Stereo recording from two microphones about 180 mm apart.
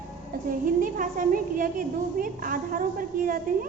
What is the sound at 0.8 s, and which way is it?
A woman's voice, 50° right (ahead or behind).